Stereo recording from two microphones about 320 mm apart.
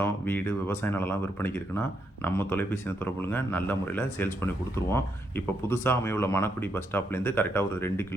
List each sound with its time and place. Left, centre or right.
0.0 s speech: centre